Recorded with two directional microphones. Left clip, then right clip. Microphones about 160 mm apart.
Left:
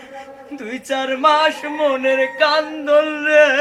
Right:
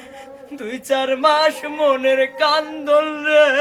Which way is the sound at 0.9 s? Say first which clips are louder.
Even; 25° right (ahead or behind).